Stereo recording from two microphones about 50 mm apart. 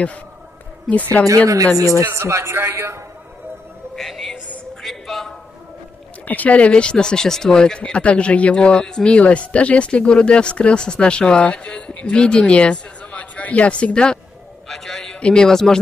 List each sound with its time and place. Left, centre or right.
1.2 s speech: left
1.8 s speech: right
2.1 s a man's voice: right
3.9 s music: centre
4.8 s a sound: centre
6.2 s speech: left; by 9.1 s centre
9.1 s speech: left; by 15.1 s centre
15.1 s speech: left
15.4 s speech: centre